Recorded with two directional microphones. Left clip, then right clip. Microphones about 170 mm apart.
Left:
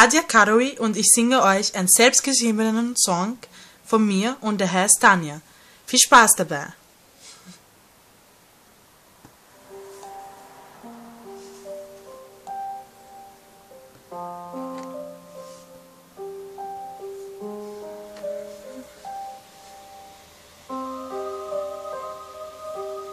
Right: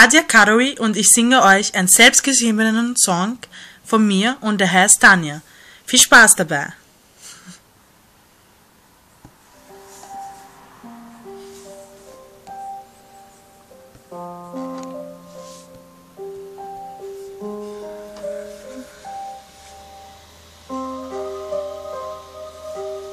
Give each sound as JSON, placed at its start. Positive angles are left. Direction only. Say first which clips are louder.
{"t": 0.0, "sound": "speech", "louder": "right 5 dB", "side_deg": 10}
{"t": 14.1, "sound": "music", "louder": "right 1 dB", "side_deg": -5}
{"t": 17.5, "sound": "music", "louder": "right 6 dB", "side_deg": -10}
{"t": 20.6, "sound": "music", "louder": "right 3 dB", "side_deg": -30}